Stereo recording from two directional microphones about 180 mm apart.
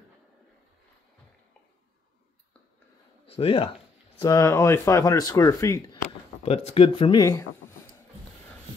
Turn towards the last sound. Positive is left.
turn(degrees=15)  # may be behind; listen again after turning